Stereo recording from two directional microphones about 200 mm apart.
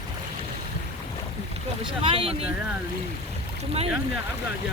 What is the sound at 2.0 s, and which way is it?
Boat, 25° right (ahead or behind).